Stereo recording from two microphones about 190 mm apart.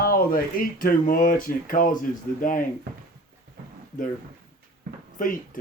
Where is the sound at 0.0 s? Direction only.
50° left (ahead or behind).